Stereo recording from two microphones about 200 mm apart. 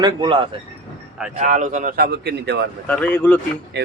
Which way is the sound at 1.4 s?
35° right (ahead or behind).